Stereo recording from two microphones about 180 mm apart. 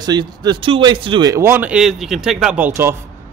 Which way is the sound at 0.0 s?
25° right (ahead or behind).